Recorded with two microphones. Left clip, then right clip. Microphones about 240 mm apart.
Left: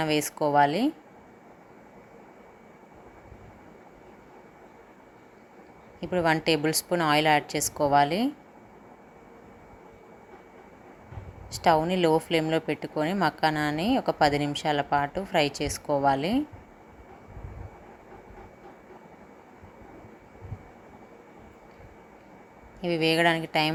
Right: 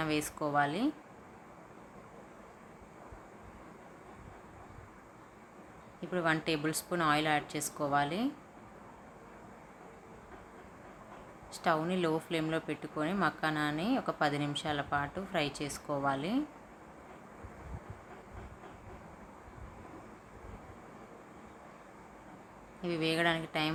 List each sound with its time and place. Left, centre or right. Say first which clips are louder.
0.0 s speech: left 8 dB; left
6.0 s speech: left 7 dB; left
11.5 s speech: left 9 dB; left
22.8 s speech: left 9 dB; left